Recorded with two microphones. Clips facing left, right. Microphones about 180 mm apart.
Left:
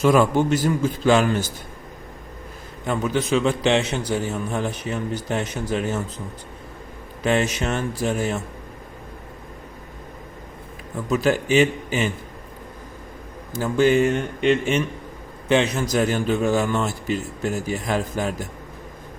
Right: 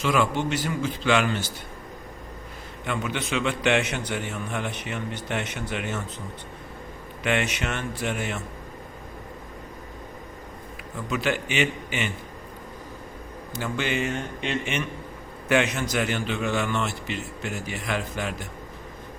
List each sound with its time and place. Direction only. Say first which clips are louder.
0.0 s a man's voice: left 7 dB; 45° left (ahead or behind)
2.8 s a man's voice: left 6 dB; 40° left (ahead or behind)
7.3 s a man's voice: left 5 dB; 35° left (ahead or behind)
11.1 s a man's voice: left 8 dB; 40° left (ahead or behind)
13.5 s a man's voice: left 10 dB; 40° left (ahead or behind)